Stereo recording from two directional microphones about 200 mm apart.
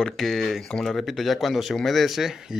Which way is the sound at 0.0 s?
Centre (ahead or behind).